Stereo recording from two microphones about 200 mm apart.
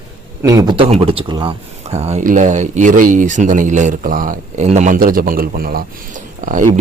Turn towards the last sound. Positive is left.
turn(degrees=-40)  # may be behind; listen again after turning